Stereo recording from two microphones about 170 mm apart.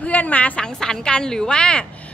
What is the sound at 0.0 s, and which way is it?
A woman's voice, 10° left (ahead or behind).